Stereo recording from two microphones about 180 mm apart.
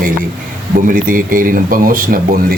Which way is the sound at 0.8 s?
50° right (ahead or behind).